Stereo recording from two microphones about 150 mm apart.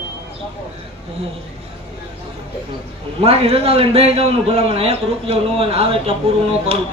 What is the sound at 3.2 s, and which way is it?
A man's voice, 40° right (ahead or behind).